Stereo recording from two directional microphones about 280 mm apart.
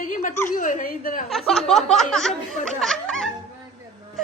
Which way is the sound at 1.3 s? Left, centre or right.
Centre.